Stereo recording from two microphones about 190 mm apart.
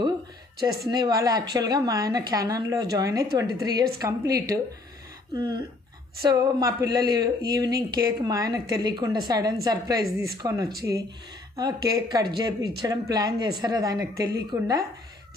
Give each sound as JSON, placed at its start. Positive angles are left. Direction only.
{"t": 0.8, "sound": "a woman's voice", "side_deg": -20}